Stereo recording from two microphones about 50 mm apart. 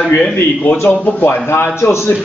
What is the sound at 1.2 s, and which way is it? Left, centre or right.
Speech, left.